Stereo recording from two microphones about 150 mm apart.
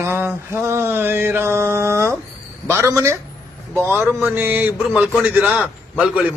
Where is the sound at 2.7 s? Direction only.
20° right (ahead or behind).